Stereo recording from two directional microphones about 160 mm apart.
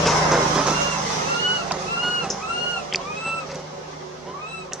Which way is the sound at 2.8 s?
Centre (ahead or behind).